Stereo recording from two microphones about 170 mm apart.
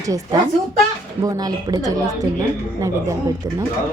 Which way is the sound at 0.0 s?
20° right (ahead or behind).